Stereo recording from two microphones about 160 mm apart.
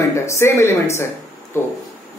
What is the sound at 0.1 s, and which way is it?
Speech, 15° left (ahead or behind).